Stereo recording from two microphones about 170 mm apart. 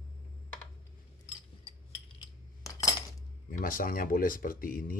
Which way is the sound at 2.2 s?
20° left (ahead or behind).